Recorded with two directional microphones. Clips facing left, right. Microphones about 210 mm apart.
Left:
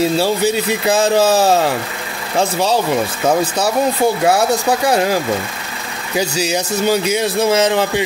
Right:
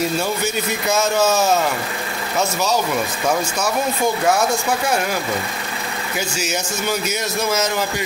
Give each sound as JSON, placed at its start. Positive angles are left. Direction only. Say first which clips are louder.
{"t": 0.0, "sound": "speech", "louder": "left 6 dB", "side_deg": 30}
{"t": 6.1, "sound": "speech", "louder": "left 7 dB", "side_deg": 35}